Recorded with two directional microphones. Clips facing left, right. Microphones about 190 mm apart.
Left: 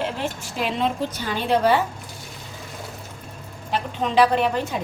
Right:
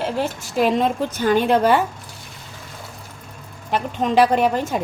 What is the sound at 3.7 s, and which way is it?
A woman's voice, 45° right (ahead or behind).